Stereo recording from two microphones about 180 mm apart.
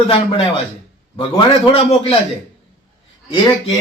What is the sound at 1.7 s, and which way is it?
Speech, 30° left (ahead or behind).